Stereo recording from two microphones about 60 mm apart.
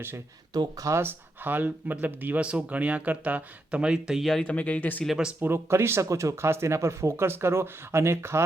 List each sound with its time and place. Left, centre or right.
0.5 s speech: right
0.9 s speech: right; by 4.3 s centre
4.4 s speech: left
5.0 s speech: centre
5.4 s speech: right
6.1 s speech: right